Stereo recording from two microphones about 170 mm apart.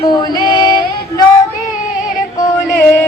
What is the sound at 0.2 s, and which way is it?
Female singing, 25° left (ahead or behind).